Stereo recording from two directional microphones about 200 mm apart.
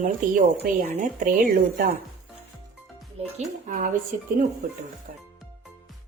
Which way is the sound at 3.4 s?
40° right (ahead or behind).